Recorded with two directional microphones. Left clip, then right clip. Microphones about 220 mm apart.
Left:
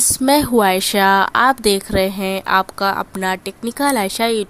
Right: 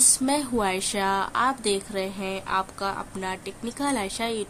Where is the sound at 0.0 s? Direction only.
35° left (ahead or behind).